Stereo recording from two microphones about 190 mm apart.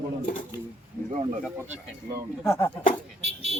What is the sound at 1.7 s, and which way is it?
Speech, 15° right (ahead or behind).